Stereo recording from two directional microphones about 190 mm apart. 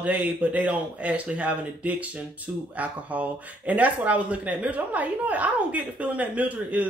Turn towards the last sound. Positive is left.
turn(degrees=-10)  # may be behind; listen again after turning